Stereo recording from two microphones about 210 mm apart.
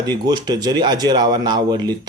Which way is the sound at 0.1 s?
20° right (ahead or behind).